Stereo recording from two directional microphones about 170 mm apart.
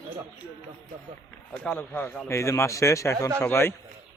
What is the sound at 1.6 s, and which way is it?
A man's voice, 10° left (ahead or behind).